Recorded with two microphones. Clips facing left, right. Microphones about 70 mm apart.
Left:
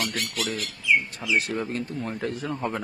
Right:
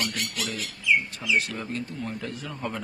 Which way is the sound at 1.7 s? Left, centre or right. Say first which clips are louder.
Left 2 dB; left.